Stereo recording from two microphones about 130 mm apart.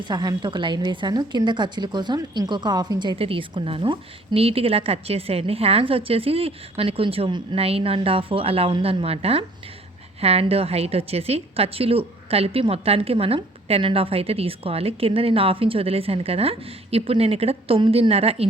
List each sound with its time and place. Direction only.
0.0 s a woman's voice: 30° right (ahead or behind); by 18.4 s 50° right (ahead or behind)